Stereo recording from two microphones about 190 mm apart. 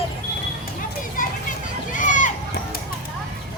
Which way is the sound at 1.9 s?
40° left (ahead or behind).